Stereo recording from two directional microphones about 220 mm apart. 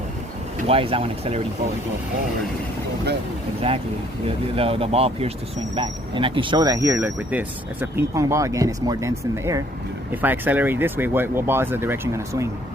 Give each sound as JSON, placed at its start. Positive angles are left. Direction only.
{"t": 0.7, "sound": "speech", "side_deg": -25}
{"t": 3.6, "sound": "speech", "side_deg": -25}